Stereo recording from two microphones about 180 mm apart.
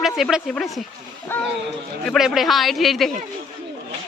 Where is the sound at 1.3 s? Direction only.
10° left (ahead or behind).